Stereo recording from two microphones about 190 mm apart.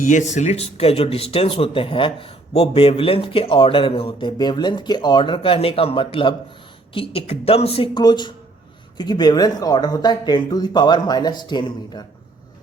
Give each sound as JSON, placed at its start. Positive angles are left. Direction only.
{"t": 0.0, "sound": "speech", "side_deg": 40}